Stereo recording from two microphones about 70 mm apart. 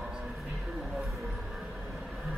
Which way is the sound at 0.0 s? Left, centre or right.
Centre.